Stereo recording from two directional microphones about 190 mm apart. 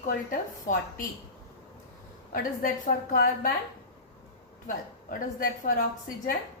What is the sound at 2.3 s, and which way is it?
A woman's voice, 45° left (ahead or behind).